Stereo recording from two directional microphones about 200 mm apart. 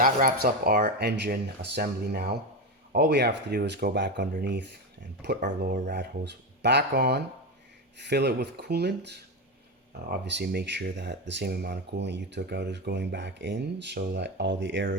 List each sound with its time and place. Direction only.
0.0 s speech: 45° right (ahead or behind); by 14.8 s 65° right (ahead or behind)